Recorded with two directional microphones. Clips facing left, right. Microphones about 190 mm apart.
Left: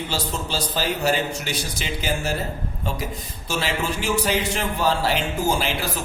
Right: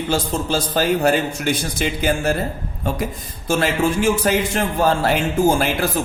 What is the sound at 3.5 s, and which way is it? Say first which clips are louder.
A man's voice: right 7 dB; 50° right (ahead or behind).